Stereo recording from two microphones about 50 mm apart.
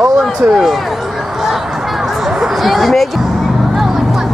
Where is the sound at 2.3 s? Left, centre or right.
Centre.